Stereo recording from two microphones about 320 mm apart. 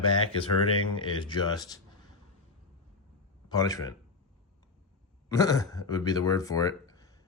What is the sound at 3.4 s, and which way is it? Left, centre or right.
Speech, centre.